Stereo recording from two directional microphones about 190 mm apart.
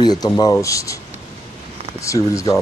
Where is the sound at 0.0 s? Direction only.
20° left (ahead or behind).